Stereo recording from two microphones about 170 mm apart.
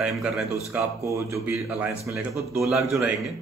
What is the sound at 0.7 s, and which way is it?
A man's voice, 15° right (ahead or behind).